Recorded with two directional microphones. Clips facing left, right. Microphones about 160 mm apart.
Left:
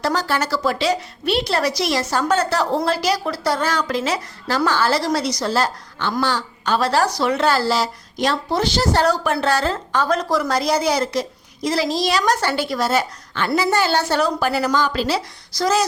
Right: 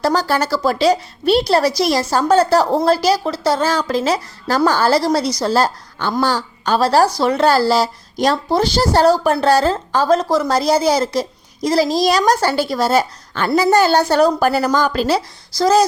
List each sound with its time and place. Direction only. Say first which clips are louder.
0.0 s a woman's voice: right 4 dB; 35° right (ahead or behind)
15.5 s a woman's voice: right 6 dB; 35° right (ahead or behind)